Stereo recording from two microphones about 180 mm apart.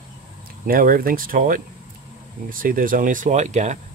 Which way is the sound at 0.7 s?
55° right (ahead or behind).